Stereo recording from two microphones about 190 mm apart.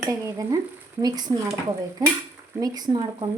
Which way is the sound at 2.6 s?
20° right (ahead or behind).